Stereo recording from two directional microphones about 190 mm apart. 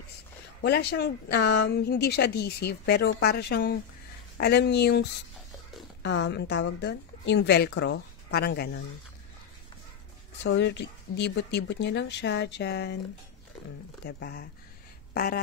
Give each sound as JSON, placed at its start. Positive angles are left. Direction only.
{"t": 0.6, "sound": "speech", "side_deg": 60}
{"t": 6.0, "sound": "speech", "side_deg": 65}
{"t": 10.4, "sound": "speech", "side_deg": 65}
{"t": 14.0, "sound": "speech", "side_deg": 60}